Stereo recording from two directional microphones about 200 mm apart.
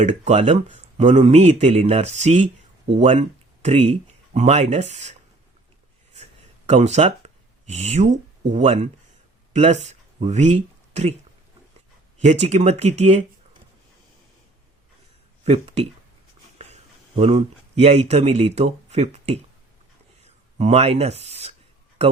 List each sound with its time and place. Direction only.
0.0 s speech: 35° right (ahead or behind)
6.7 s speech: 35° right (ahead or behind)
12.2 s speech: 35° right (ahead or behind)
15.4 s speech: 30° right (ahead or behind)
17.2 s speech: 30° right (ahead or behind)